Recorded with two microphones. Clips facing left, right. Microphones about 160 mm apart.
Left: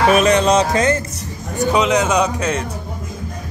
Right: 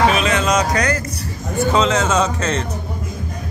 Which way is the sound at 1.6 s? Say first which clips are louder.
Left 1 dB; 15° left (ahead or behind).